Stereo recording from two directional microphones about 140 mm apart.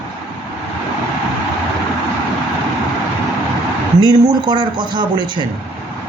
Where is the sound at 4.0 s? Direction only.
30° right (ahead or behind).